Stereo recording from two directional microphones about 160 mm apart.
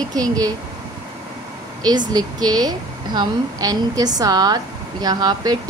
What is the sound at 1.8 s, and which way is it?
A woman's voice, 25° right (ahead or behind).